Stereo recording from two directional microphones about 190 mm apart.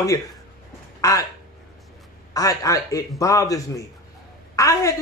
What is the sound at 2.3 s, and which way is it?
Speech, 20° left (ahead or behind).